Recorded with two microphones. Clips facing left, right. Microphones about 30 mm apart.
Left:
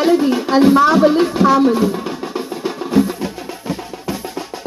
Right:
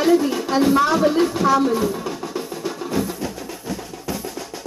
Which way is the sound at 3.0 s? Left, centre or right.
Left.